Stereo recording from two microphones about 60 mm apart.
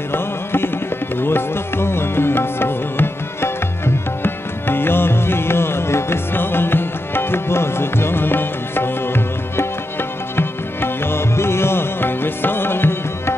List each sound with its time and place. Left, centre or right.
0.1 s music: left